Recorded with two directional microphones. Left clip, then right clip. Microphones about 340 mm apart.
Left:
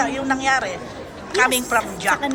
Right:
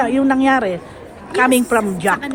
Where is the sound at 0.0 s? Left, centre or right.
Right.